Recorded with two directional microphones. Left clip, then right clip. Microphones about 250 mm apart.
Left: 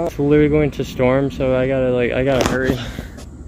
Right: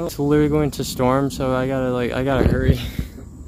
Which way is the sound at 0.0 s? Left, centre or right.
Centre.